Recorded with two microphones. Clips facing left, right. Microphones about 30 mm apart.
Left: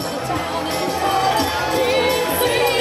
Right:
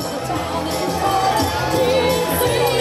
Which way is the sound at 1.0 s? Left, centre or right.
Centre.